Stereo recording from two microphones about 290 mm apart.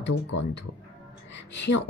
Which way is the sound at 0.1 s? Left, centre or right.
Left.